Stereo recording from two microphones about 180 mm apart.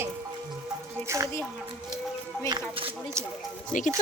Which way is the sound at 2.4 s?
25° right (ahead or behind).